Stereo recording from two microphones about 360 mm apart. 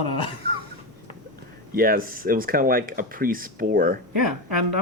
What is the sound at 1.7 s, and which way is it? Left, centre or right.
Speech, right.